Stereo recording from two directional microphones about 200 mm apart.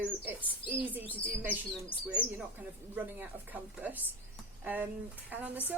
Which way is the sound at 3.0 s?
10° right (ahead or behind).